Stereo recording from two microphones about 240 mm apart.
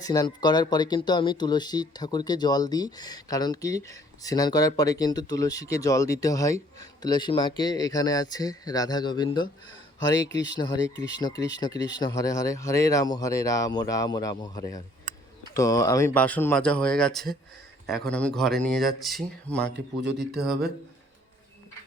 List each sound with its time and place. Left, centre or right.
0.0 s speech: centre
19.6 s speech: right